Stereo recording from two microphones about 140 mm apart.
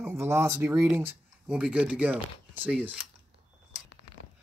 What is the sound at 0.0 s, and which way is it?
Speech, 15° right (ahead or behind).